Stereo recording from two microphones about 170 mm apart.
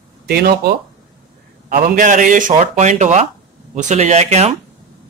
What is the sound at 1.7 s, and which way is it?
A man's voice, 55° right (ahead or behind).